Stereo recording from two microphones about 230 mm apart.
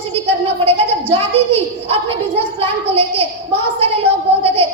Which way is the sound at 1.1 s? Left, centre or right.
Right.